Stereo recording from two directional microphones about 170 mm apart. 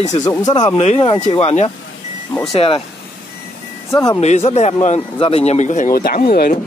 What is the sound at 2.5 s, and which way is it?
Speech, 35° left (ahead or behind).